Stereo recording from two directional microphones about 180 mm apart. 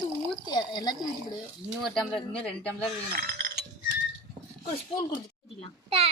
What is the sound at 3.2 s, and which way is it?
Chink, 55° right (ahead or behind).